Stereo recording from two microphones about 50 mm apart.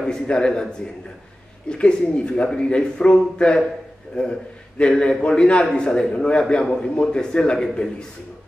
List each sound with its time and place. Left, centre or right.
0.0 s a man's voice: centre